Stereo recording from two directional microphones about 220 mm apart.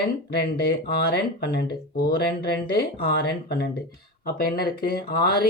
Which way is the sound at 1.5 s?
45° left (ahead or behind).